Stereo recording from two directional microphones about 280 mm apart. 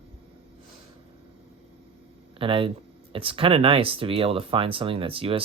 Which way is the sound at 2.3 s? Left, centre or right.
Centre.